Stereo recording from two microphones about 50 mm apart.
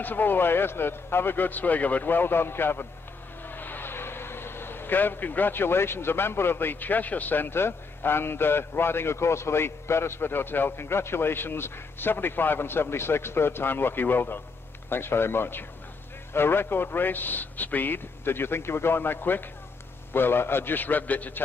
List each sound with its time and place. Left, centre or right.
0.0 s speech: left